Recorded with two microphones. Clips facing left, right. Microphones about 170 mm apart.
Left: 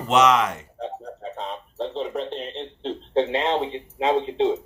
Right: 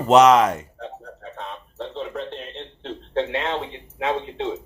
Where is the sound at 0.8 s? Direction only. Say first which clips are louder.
Left 4 dB; 20° left (ahead or behind).